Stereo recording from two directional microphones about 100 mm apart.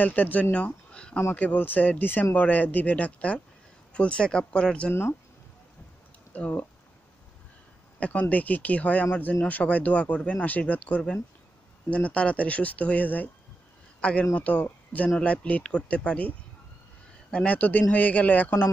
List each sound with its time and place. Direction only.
0.0 s speech: 15° left (ahead or behind)
6.3 s speech: 15° left (ahead or behind)
8.0 s speech: 15° left (ahead or behind)
14.3 s speech: 15° left (ahead or behind)